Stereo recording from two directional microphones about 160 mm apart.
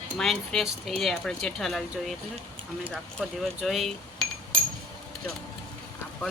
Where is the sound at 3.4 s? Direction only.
Centre (ahead or behind).